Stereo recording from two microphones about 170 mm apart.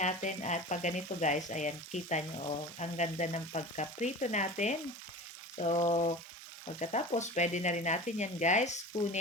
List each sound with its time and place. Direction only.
0.0 s speech: 45° left (ahead or behind)
5.5 s frying: 40° left (ahead or behind)
6.7 s speech: 45° left (ahead or behind)